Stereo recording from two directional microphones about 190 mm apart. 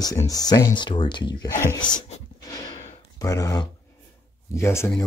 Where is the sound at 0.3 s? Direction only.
20° left (ahead or behind).